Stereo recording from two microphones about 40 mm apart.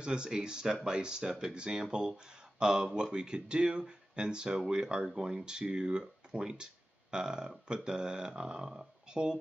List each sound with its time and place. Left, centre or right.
0.0 s speech: right